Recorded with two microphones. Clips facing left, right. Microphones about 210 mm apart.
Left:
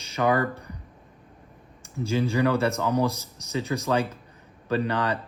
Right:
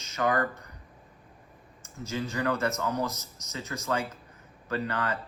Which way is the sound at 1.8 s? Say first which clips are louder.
Left 8 dB; 15° left (ahead or behind).